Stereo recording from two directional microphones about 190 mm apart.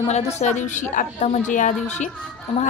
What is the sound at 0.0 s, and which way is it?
Speech, 35° left (ahead or behind).